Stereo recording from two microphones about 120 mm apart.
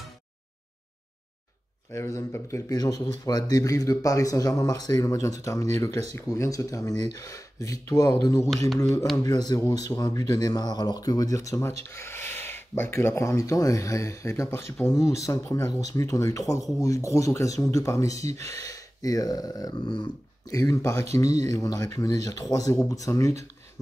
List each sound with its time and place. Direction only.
1.9 s speech: 25° left (ahead or behind)
11.9 s a sound: 20° left (ahead or behind)
13.4 s speech: 30° left (ahead or behind)
20.4 s speech: 30° left (ahead or behind)